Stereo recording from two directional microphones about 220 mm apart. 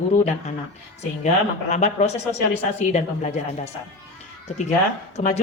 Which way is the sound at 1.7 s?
30° left (ahead or behind).